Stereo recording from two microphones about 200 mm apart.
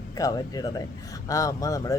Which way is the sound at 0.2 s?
20° left (ahead or behind).